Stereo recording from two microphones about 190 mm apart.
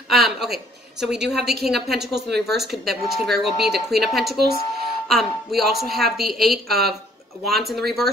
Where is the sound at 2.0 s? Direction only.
60° right (ahead or behind).